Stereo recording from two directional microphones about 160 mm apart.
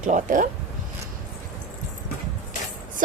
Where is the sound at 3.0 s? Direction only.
55° right (ahead or behind).